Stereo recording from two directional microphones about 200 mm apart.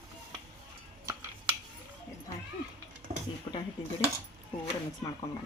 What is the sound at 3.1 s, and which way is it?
Dishes, 35° right (ahead or behind).